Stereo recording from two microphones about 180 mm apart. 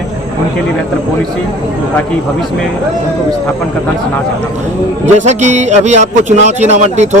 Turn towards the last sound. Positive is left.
turn(degrees=-40)  # may be behind; listen again after turning